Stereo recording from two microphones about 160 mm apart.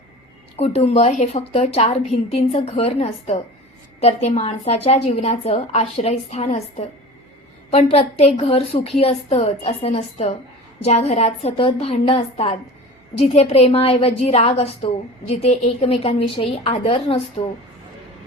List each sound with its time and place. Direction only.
0.5 s a woman's voice: 40° left (ahead or behind)